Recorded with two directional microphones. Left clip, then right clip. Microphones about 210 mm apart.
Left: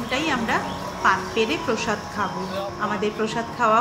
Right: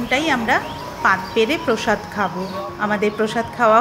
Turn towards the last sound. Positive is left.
turn(degrees=-25)  # may be behind; listen again after turning